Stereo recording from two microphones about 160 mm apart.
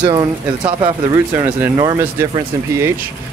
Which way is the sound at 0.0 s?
25° right (ahead or behind).